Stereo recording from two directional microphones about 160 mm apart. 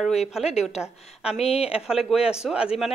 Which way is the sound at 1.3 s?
40° left (ahead or behind).